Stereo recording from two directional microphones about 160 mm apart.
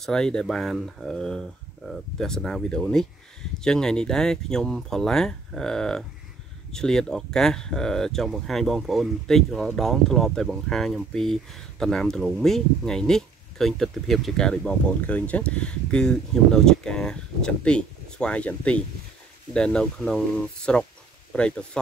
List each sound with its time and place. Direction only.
0.0 s speech: 5° left (ahead or behind)